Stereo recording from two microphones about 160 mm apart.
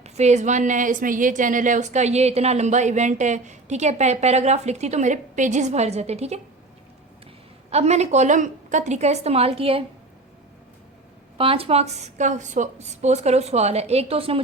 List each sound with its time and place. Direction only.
0.0 s a woman's voice: 45° right (ahead or behind)
7.7 s a woman's voice: 40° right (ahead or behind)
11.3 s a woman's voice: 35° right (ahead or behind)